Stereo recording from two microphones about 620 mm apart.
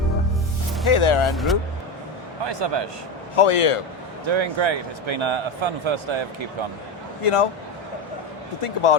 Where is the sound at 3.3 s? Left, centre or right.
Left.